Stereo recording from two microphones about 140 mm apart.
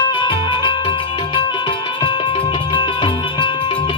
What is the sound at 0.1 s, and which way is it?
Music, 35° left (ahead or behind).